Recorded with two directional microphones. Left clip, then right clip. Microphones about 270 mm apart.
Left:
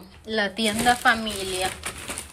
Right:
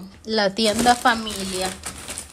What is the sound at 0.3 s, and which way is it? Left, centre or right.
A woman's voice, right.